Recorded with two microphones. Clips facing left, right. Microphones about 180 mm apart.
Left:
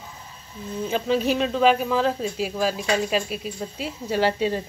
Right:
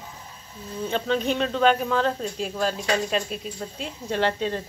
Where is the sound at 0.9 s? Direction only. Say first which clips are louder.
Left 2 dB; 5° left (ahead or behind).